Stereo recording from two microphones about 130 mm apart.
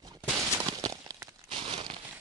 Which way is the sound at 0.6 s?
30° right (ahead or behind).